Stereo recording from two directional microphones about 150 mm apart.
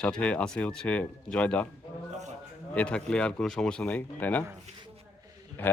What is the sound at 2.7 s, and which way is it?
Speech, 10° left (ahead or behind).